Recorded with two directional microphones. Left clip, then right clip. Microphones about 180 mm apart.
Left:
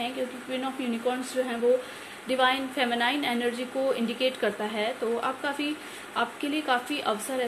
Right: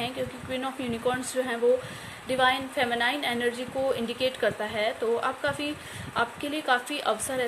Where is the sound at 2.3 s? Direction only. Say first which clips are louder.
Even; 20° right (ahead or behind).